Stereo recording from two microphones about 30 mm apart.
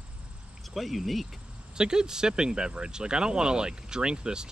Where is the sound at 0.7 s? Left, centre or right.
Centre.